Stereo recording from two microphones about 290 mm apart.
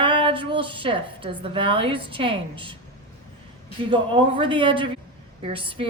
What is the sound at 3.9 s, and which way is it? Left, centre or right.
A woman's voice, centre.